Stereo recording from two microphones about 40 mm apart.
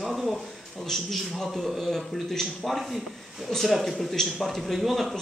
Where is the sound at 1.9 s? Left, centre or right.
Centre.